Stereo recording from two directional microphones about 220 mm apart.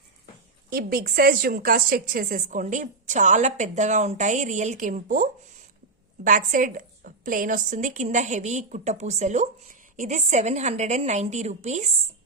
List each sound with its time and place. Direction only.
0.7 s a woman's voice: 40° right (ahead or behind)